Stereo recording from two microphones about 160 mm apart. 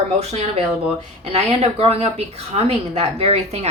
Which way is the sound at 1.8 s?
40° right (ahead or behind).